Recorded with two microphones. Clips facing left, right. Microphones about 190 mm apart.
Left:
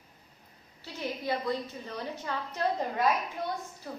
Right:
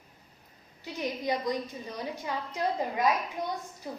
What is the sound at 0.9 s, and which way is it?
A woman's voice, 15° right (ahead or behind).